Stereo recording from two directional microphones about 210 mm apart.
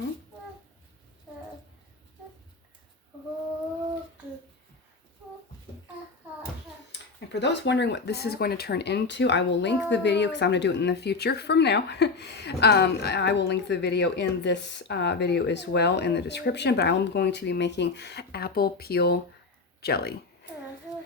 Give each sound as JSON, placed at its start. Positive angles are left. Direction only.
{"t": 7.3, "sound": "speech", "side_deg": 55}